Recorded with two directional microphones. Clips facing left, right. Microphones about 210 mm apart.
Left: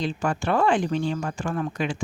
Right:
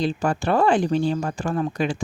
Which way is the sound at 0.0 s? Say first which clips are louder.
Right 3 dB; 35° right (ahead or behind).